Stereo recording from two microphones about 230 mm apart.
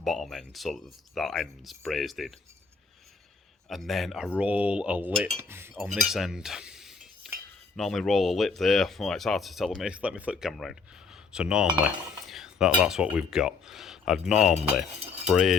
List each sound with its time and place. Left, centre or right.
0.0 s speech: centre
3.7 s speech: centre
7.2 s cutlery: centre
7.8 s speech: centre
12.2 s cutlery: centre
12.8 s speech: centre
14.3 s speech: left
15.3 s speech: centre